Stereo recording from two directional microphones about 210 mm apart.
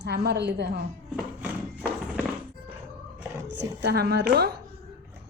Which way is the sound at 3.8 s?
50° right (ahead or behind).